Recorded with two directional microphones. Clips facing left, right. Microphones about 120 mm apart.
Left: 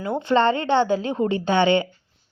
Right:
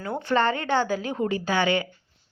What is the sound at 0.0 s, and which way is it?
Speech, 20° left (ahead or behind).